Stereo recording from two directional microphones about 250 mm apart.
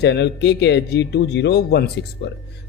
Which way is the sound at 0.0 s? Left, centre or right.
Left.